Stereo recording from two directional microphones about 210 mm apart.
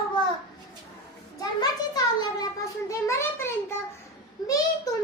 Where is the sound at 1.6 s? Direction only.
20° left (ahead or behind).